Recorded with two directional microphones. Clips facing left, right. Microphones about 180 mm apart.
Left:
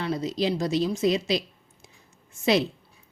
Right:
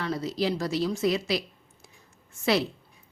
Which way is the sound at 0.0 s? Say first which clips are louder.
Left 2 dB; 20° left (ahead or behind).